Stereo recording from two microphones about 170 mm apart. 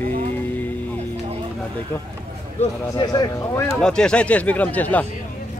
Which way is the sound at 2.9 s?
25° left (ahead or behind).